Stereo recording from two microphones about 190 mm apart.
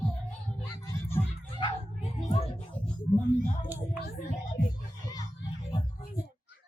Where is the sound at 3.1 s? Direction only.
35° right (ahead or behind).